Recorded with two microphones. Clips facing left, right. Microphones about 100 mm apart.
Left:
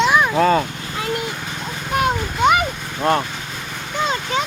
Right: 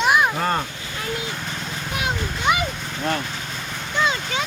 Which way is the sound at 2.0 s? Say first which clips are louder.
Left 9 dB; 50° left (ahead or behind).